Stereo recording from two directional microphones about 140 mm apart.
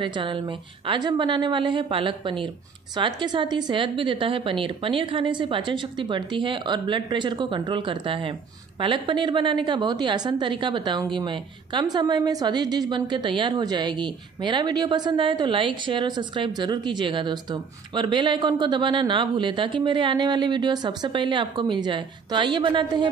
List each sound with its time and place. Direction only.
0.0 s a woman's voice: 35° right (ahead or behind)